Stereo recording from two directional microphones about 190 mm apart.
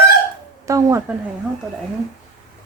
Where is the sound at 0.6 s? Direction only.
15° right (ahead or behind).